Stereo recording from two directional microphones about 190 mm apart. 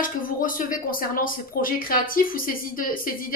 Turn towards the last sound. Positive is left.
turn(degrees=50)  # may be behind; listen again after turning